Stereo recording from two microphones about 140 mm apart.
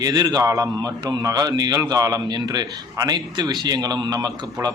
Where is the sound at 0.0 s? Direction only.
30° right (ahead or behind).